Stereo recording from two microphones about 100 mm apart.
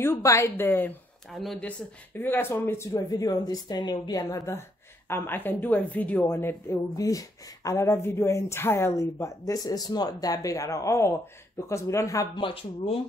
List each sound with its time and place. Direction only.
0.0 s speech: 25° left (ahead or behind)
1.3 s speech: centre (ahead or behind)
1.6 s speech: 15° left (ahead or behind)
3.1 s a woman's voice: 40° left (ahead or behind)
9.5 s a woman's voice: 40° left (ahead or behind)
12.4 s speech: 65° left (ahead or behind)